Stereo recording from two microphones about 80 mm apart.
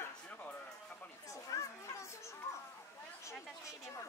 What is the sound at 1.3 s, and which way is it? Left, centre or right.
Children playing, left.